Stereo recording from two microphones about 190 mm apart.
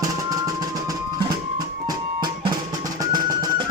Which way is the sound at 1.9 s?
20° right (ahead or behind).